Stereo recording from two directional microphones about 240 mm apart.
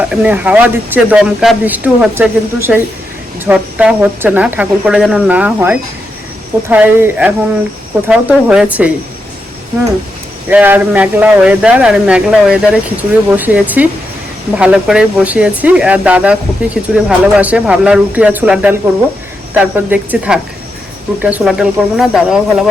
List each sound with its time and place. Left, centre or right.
0.0 s speech: centre
10.5 s speech: centre